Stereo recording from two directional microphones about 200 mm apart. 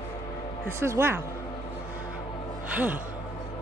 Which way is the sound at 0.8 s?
10° right (ahead or behind).